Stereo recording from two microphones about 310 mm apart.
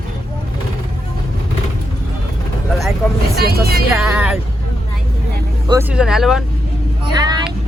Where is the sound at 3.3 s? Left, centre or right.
Right.